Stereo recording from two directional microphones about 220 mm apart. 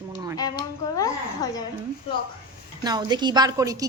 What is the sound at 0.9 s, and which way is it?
Speech, 15° left (ahead or behind).